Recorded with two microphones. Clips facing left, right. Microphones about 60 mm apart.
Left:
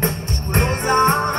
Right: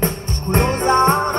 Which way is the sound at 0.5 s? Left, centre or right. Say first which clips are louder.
Right 2 dB; left.